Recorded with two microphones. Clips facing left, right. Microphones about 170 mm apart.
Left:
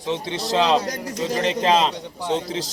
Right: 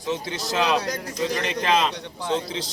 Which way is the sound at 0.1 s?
30° left (ahead or behind).